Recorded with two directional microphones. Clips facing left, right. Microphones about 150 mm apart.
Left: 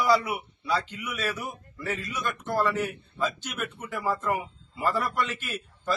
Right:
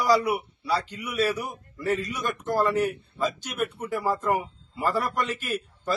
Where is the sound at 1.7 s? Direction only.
40° right (ahead or behind).